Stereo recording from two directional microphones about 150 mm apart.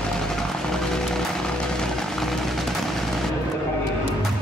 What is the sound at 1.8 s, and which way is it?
Music, centre (ahead or behind).